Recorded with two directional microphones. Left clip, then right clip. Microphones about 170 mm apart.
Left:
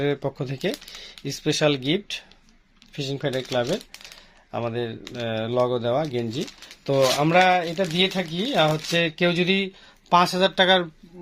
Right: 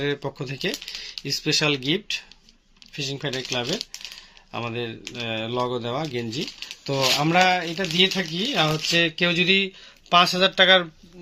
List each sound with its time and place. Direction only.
0.0 s speech: 65° left (ahead or behind)
4.5 s speech: 55° left (ahead or behind)